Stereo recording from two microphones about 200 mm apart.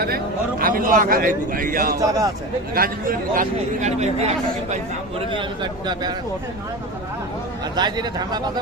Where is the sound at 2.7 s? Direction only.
45° right (ahead or behind).